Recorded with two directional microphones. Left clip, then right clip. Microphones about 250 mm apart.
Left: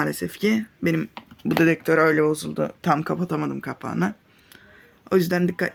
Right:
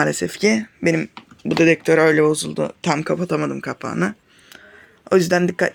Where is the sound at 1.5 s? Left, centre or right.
Centre.